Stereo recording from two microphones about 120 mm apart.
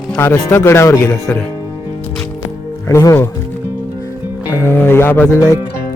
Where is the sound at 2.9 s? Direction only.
30° left (ahead or behind).